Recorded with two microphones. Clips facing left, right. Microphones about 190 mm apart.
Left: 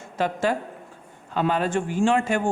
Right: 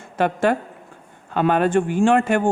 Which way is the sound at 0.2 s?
60° right (ahead or behind).